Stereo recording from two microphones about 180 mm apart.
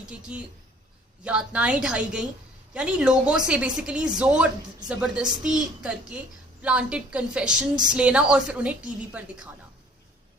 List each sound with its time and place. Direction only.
0.0 s a woman's voice: 5° right (ahead or behind)